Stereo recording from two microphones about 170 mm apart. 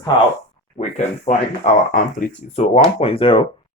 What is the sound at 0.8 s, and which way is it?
Speech, 40° left (ahead or behind).